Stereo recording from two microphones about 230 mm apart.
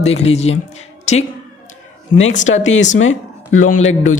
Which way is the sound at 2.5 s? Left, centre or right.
Left.